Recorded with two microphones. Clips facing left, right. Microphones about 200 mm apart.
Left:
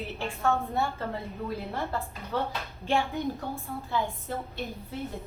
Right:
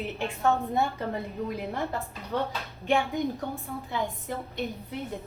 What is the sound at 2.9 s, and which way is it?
Speech, 15° right (ahead or behind).